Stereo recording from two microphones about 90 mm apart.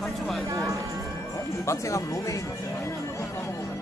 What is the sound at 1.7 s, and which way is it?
Speech, 35° left (ahead or behind).